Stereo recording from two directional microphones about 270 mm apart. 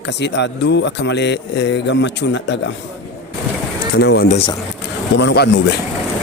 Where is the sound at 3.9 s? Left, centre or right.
Left.